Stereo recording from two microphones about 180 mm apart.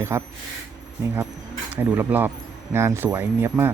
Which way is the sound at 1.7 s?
10° right (ahead or behind).